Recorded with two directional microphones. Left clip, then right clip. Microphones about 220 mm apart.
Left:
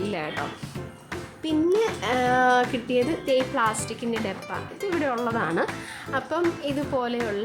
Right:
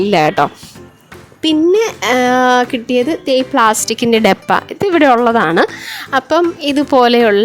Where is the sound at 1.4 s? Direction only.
40° right (ahead or behind).